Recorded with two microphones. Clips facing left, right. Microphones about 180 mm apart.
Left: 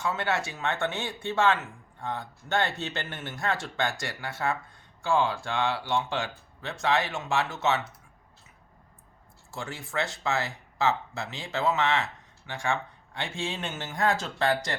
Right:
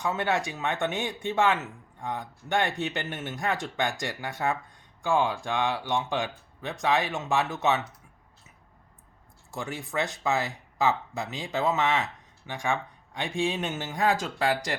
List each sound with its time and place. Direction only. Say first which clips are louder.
0.0 s speech: right 2 dB; 15° right (ahead or behind)
9.5 s speech: right 3 dB; 15° right (ahead or behind)